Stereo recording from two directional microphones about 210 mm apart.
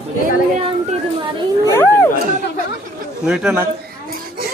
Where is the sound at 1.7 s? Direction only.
10° left (ahead or behind).